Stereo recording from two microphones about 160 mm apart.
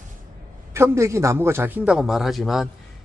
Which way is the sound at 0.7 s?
15° right (ahead or behind).